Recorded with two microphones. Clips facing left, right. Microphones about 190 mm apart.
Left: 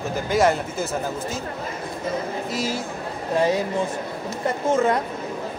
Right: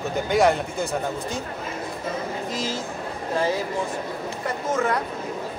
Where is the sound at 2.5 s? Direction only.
10° left (ahead or behind).